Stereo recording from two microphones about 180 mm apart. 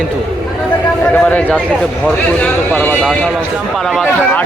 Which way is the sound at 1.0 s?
10° left (ahead or behind).